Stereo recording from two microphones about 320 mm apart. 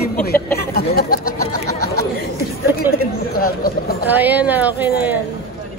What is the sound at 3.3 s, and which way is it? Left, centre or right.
Chatter, left.